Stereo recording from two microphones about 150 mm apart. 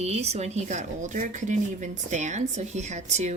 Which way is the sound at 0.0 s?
45° right (ahead or behind).